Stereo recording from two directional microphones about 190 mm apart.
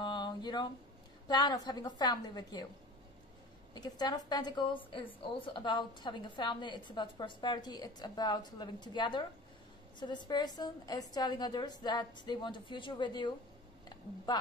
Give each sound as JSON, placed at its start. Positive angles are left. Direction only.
{"t": 0.0, "sound": "a sound", "side_deg": 25}
{"t": 1.2, "sound": "a woman's voice", "side_deg": 20}
{"t": 3.7, "sound": "a woman's voice", "side_deg": 20}